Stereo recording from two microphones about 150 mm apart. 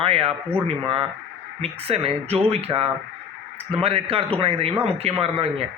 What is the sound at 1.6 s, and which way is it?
A man's voice, 40° right (ahead or behind).